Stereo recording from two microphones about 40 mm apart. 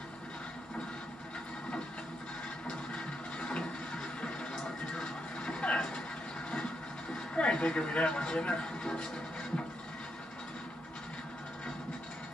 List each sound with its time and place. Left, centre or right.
2.9 s music: centre
7.3 s speech: left